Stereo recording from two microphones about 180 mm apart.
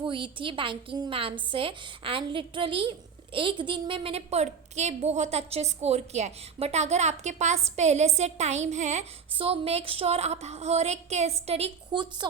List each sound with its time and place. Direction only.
0.0 s a woman's voice: 30° right (ahead or behind)